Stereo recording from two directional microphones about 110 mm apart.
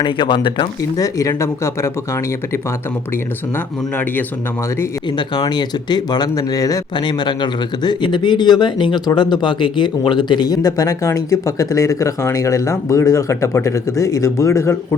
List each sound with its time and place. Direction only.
0.0 s speech: 45° left (ahead or behind)
0.9 s speech: 30° left (ahead or behind)
5.1 s speech: 40° left (ahead or behind)